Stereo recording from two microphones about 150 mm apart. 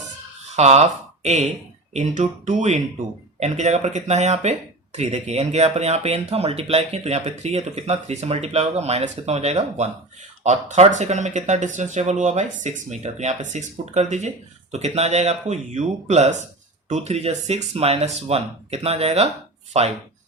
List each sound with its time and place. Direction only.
0.5 s speech: 45° right (ahead or behind)